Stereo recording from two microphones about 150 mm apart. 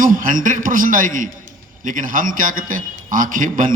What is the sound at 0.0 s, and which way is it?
A man's voice, 65° right (ahead or behind).